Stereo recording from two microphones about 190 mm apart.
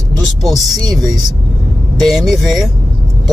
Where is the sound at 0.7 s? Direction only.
20° right (ahead or behind).